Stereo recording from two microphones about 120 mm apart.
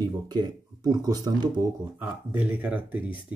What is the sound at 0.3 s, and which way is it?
Speech, 35° right (ahead or behind).